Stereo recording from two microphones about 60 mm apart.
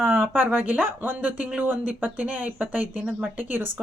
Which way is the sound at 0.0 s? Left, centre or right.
Right.